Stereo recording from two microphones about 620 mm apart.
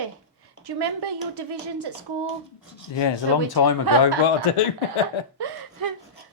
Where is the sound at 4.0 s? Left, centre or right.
Left.